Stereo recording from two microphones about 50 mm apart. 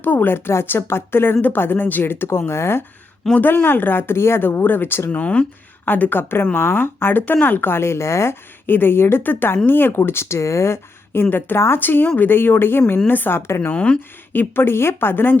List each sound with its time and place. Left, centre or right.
0.0 s speech: left
3.4 s speech: left
5.2 s speech: left
5.8 s a woman's voice: left
7.7 s speech: left
8.6 s speech: left
11.1 s speech: left
13.7 s speech: left
14.3 s speech: left